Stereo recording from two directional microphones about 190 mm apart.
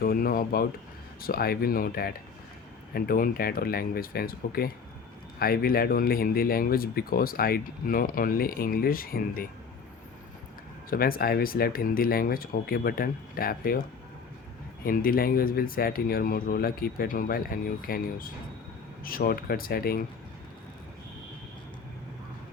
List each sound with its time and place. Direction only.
0.0 s speech: 50° left (ahead or behind)
10.8 s speech: 50° left (ahead or behind)
14.8 s speech: 50° left (ahead or behind)